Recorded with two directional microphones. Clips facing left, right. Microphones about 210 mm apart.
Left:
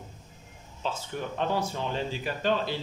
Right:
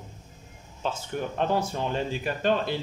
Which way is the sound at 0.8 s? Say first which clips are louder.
Right 2 dB; 55° right (ahead or behind).